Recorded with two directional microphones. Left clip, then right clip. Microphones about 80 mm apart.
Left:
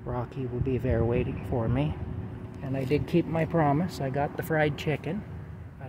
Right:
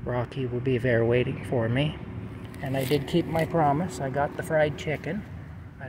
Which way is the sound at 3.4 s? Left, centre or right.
Left.